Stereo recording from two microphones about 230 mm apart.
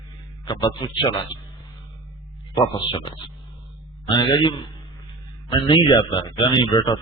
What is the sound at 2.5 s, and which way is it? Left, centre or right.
Speech, centre.